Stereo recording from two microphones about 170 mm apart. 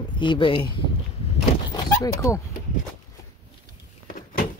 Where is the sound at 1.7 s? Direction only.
20° left (ahead or behind).